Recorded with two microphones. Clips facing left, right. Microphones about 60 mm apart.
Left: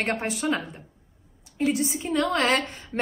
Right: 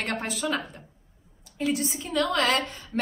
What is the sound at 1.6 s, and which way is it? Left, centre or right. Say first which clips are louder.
A woman's voice: left 3 dB; left.